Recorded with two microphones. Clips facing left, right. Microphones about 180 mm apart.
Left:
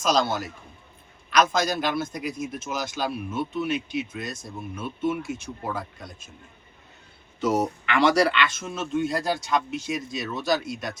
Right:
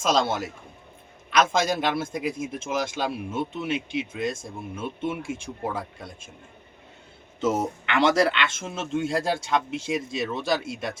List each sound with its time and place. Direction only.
0.0 s speech: 25° right (ahead or behind)
7.4 s speech: 25° right (ahead or behind)